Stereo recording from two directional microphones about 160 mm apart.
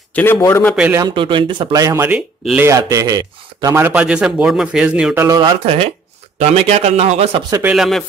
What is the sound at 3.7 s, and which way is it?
Speech, 10° right (ahead or behind).